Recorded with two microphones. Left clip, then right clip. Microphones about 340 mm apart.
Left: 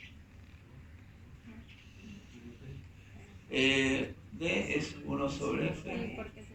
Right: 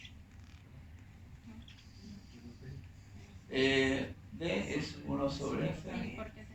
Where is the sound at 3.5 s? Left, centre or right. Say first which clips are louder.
Left 2 dB; right.